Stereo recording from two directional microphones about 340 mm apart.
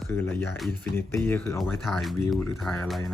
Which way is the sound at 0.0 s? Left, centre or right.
Centre.